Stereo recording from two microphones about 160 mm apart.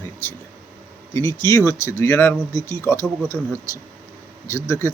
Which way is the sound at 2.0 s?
15° left (ahead or behind).